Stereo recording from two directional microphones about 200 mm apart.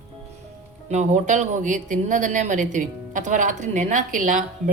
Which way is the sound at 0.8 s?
35° right (ahead or behind).